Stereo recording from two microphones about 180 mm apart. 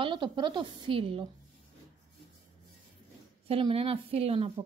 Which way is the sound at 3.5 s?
30° right (ahead or behind).